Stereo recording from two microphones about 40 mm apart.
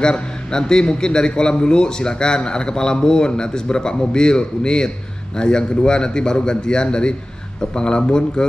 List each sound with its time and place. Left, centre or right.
0.0 s a man's voice: centre